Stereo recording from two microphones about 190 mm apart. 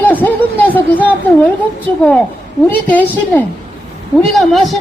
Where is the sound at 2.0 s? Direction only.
5° left (ahead or behind).